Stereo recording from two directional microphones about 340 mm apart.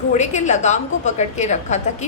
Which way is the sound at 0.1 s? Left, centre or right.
Left.